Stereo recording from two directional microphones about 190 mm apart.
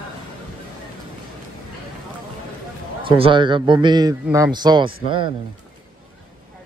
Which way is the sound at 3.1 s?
25° right (ahead or behind).